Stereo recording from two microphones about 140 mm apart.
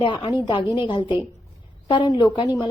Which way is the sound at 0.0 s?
35° left (ahead or behind).